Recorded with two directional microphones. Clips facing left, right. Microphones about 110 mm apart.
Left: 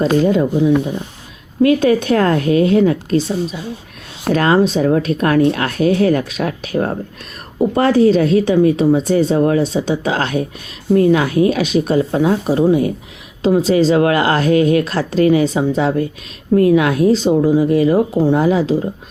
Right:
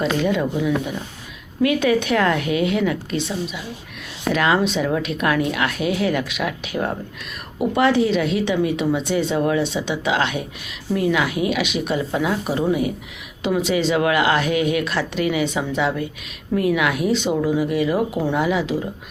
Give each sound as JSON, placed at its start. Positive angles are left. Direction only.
{"t": 0.0, "sound": "a woman's voice", "side_deg": 35}